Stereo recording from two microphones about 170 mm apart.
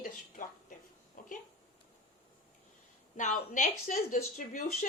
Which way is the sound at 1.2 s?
55° left (ahead or behind).